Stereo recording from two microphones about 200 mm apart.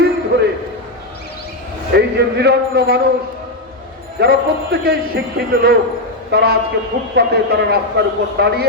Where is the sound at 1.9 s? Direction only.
55° right (ahead or behind).